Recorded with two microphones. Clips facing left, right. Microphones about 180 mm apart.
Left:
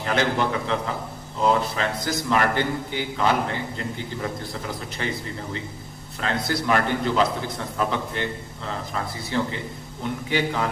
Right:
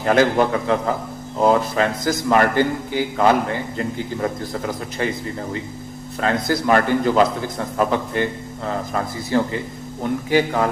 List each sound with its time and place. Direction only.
0.0 s a man's voice: 45° right (ahead or behind)
6.1 s a man's voice: 45° right (ahead or behind)